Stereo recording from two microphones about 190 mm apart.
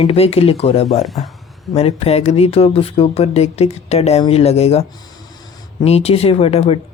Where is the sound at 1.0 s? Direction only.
Centre (ahead or behind).